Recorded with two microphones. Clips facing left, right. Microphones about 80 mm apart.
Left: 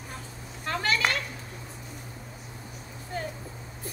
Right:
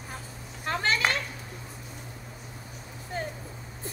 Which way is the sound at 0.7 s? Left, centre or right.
Right.